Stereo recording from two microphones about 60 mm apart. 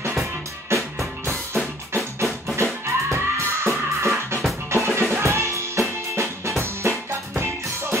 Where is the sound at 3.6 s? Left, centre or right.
Right.